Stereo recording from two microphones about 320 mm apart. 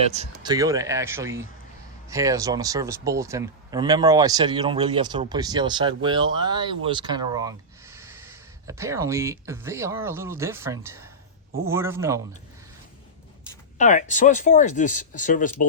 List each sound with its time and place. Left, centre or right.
0.0 s speech: centre
13.7 s speech: left